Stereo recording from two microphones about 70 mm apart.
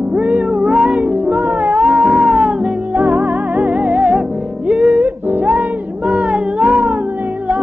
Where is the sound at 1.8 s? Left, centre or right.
Centre.